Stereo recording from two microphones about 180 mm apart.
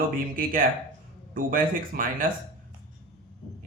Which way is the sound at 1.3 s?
50° right (ahead or behind).